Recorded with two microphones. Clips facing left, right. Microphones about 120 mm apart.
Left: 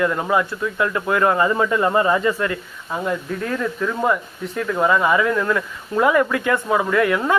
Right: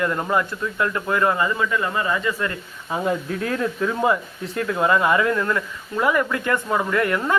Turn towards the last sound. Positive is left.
turn(degrees=10)  # may be behind; listen again after turning